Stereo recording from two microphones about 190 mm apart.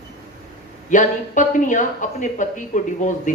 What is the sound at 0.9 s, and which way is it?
Speech, 40° left (ahead or behind).